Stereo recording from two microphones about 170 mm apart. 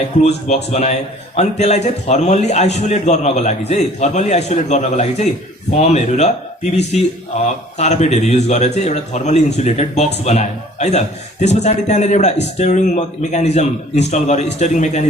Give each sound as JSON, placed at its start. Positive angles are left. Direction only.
{"t": 0.2, "sound": "a man's voice", "side_deg": 40}